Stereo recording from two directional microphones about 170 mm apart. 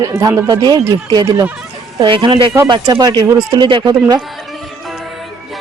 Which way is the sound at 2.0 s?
30° right (ahead or behind).